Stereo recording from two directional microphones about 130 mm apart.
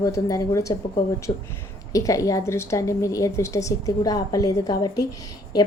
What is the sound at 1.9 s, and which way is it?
A woman's voice, 25° left (ahead or behind).